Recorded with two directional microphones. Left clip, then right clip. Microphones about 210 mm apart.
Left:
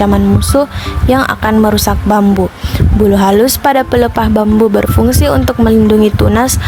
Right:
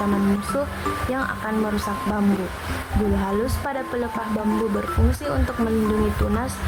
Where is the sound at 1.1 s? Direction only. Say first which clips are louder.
Left 14 dB; 55° left (ahead or behind).